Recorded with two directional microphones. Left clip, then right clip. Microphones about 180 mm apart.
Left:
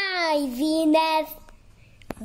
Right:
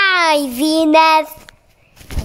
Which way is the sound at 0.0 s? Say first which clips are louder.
Right 11 dB; 20° right (ahead or behind).